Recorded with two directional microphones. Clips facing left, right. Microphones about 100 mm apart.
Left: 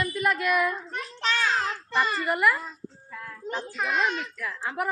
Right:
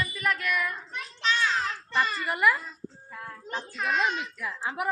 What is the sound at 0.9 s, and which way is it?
Child singing, 45° left (ahead or behind).